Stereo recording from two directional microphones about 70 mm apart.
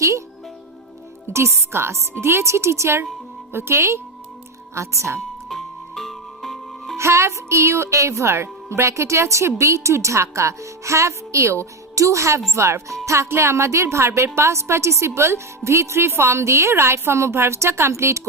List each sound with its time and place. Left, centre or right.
1.3 s a woman's voice: right
5.5 s music: centre
6.9 s a woman's voice: right